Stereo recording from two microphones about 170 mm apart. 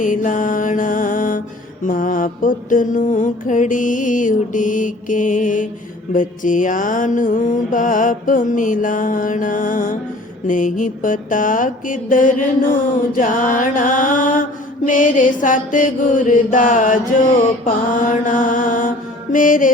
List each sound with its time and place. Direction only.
0.0 s mantra: 50° left (ahead or behind)